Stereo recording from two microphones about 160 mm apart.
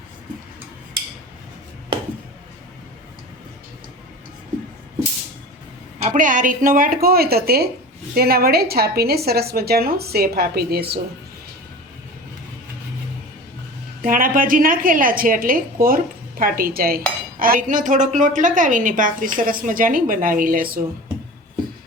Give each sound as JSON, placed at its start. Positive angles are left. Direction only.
{"t": 6.0, "sound": "a woman's voice", "side_deg": -55}
{"t": 14.0, "sound": "a woman's voice", "side_deg": -60}